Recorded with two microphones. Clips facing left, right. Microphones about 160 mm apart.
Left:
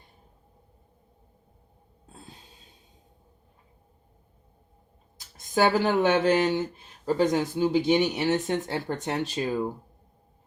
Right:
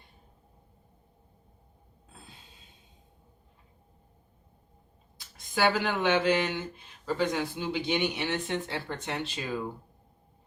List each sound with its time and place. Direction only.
5.6 s speech: 45° left (ahead or behind)